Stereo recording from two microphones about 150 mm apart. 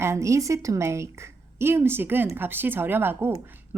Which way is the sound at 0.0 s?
20° right (ahead or behind).